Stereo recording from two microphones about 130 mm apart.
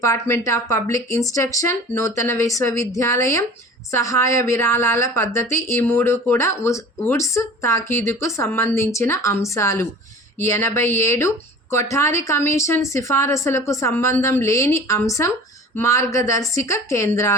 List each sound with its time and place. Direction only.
0.0 s a woman's voice: 25° left (ahead or behind)